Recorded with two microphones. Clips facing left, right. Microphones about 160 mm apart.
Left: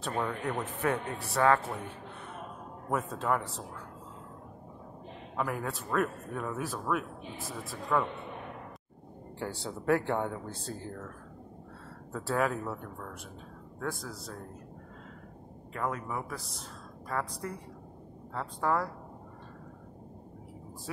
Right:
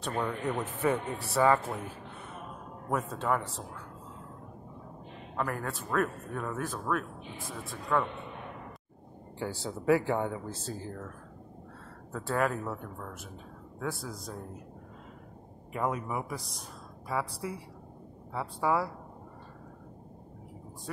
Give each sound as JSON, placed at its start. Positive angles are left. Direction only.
{"t": 0.0, "sound": "speech", "side_deg": 0}
{"t": 2.9, "sound": "speech", "side_deg": 0}
{"t": 5.3, "sound": "speech", "side_deg": 5}
{"t": 9.4, "sound": "speech", "side_deg": 0}
{"t": 12.1, "sound": "speech", "side_deg": 0}
{"t": 15.7, "sound": "speech", "side_deg": -15}